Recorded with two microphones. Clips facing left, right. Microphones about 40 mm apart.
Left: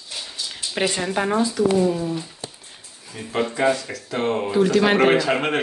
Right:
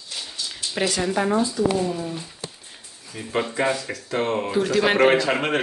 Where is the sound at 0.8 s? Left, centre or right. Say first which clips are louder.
Left 1 dB; centre.